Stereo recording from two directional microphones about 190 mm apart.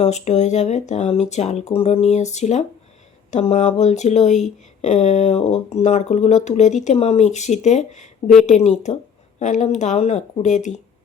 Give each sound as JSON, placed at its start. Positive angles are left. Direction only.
{"t": 0.0, "sound": "speech", "side_deg": 35}